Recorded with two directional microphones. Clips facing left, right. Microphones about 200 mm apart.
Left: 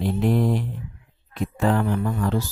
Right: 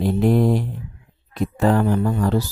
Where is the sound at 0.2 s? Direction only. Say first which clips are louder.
Right 4 dB; 40° right (ahead or behind).